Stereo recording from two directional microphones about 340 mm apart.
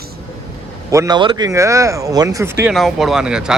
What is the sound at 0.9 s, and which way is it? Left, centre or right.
Speech, centre.